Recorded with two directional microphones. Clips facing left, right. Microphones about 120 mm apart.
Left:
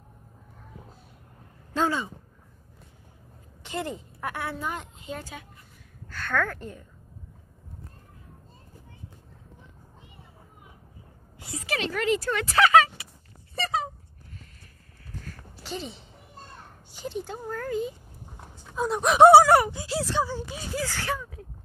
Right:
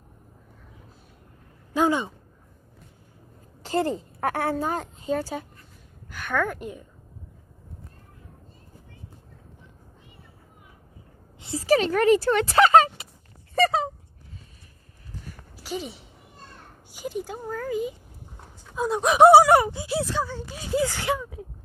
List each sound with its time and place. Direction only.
1.7 s speech: 15° right (ahead or behind)
3.6 s a woman's voice: 35° right (ahead or behind)
6.0 s a woman's voice: 15° right (ahead or behind)
11.3 s a sound: 25° right (ahead or behind)
11.6 s speech: 40° right (ahead or behind)
15.2 s a sound: 10° right (ahead or behind)
16.9 s speech: 10° right (ahead or behind)
19.0 s speech: 10° right (ahead or behind)
19.4 s speech: 20° right (ahead or behind)
20.1 s speech: 5° left (ahead or behind)
20.7 s speech: 15° right (ahead or behind)